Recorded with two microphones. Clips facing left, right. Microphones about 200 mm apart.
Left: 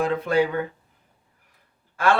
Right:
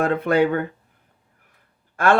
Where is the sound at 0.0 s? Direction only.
55° right (ahead or behind).